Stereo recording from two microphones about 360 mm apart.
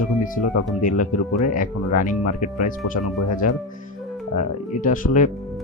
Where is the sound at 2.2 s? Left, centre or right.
Left.